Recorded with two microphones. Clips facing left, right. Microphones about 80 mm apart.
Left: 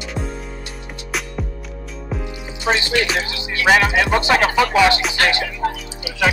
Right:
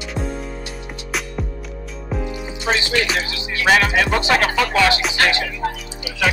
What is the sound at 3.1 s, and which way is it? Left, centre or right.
Music, left.